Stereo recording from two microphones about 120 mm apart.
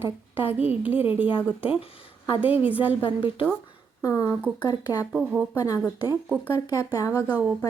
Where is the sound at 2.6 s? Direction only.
15° right (ahead or behind).